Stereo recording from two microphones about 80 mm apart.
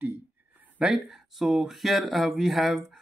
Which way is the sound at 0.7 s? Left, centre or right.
Centre.